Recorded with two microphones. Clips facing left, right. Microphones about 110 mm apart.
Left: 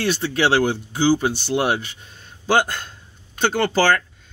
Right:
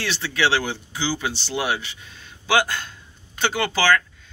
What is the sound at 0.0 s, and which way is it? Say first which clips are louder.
Speech: left 3 dB; 45° left (ahead or behind).